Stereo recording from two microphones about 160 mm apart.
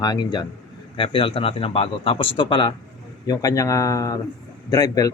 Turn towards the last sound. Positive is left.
turn(degrees=20)  # may be behind; listen again after turning